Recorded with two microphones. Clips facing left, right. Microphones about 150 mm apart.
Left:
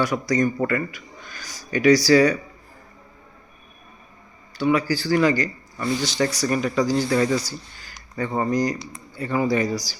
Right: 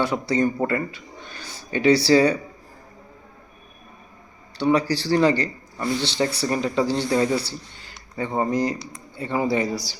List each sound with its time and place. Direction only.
0.0 s speech: 30° right (ahead or behind)
4.5 s speech: 35° right (ahead or behind)